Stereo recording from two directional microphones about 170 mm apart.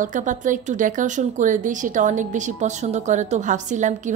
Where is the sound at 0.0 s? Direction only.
50° right (ahead or behind).